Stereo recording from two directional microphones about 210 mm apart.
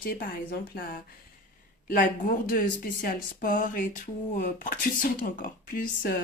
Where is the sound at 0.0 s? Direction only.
45° left (ahead or behind).